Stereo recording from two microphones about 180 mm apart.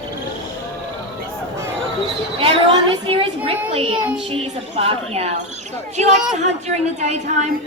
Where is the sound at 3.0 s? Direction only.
30° right (ahead or behind).